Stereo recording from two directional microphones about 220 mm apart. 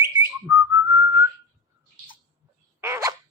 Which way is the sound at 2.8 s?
15° right (ahead or behind).